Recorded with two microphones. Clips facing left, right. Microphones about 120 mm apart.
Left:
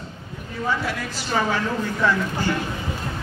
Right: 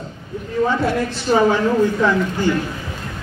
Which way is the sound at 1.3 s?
30° right (ahead or behind).